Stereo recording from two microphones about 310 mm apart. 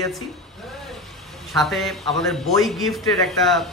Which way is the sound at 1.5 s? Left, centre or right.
Centre.